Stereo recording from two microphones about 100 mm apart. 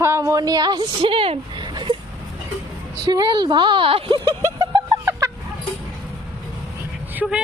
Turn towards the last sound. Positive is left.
turn(degrees=-15)  # may be behind; listen again after turning